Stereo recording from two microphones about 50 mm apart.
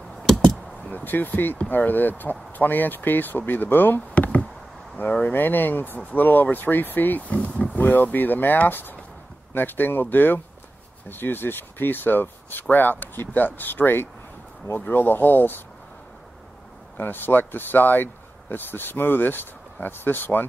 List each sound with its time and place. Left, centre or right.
0.9 s speech: left
7.7 s speech: left
16.9 s speech: left